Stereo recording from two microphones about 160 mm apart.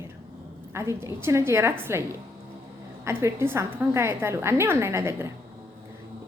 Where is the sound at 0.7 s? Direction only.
20° right (ahead or behind).